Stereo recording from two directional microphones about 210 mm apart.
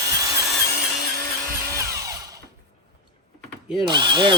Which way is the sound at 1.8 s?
15° right (ahead or behind).